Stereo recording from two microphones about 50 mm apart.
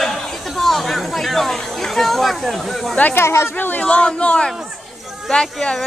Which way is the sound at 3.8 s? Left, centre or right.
Centre.